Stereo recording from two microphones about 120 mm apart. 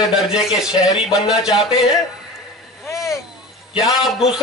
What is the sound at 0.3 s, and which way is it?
A man's voice, 5° right (ahead or behind).